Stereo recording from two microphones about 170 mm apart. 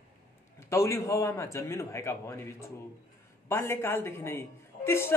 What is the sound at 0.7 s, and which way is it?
A man's voice, 15° left (ahead or behind).